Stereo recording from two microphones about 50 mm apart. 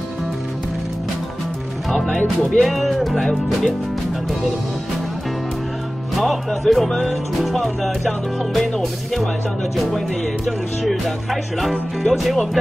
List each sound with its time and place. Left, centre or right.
1.9 s speech: centre
6.1 s speech: centre